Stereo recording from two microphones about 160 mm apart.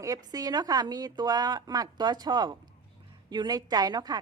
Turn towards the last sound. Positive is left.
turn(degrees=-25)  # may be behind; listen again after turning